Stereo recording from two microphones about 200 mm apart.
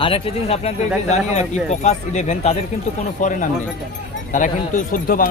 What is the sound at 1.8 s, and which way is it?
Speech, 35° left (ahead or behind).